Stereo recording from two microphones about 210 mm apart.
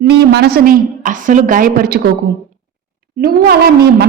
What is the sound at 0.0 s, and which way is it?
Speech, 50° right (ahead or behind).